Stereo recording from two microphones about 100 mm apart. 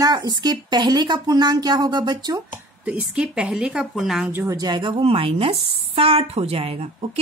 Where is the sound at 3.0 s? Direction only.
10° right (ahead or behind).